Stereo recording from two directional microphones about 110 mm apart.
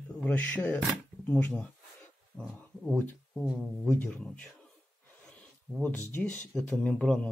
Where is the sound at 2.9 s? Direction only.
15° left (ahead or behind).